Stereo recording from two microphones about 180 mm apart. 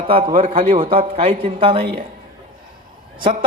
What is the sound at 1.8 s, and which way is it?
Speech, 60° right (ahead or behind).